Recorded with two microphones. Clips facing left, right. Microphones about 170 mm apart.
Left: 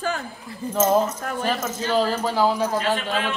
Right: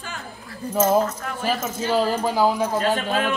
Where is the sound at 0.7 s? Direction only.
10° right (ahead or behind).